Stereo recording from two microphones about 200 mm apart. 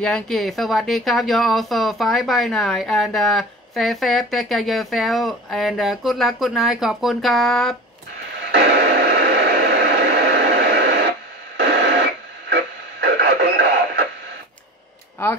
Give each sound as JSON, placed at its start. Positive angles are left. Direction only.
{"t": 0.0, "sound": "speech", "side_deg": 0}
{"t": 8.5, "sound": "a sound", "side_deg": -55}
{"t": 13.0, "sound": "radio", "side_deg": -55}